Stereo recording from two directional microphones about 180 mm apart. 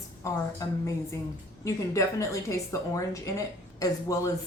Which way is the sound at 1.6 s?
15° left (ahead or behind).